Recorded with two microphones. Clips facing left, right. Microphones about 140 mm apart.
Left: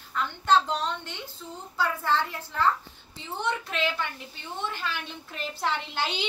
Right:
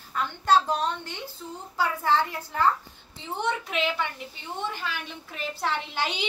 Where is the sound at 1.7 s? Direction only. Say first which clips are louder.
Right 2 dB; 15° right (ahead or behind).